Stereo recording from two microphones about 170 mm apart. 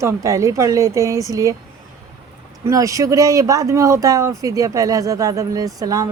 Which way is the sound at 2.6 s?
20° right (ahead or behind).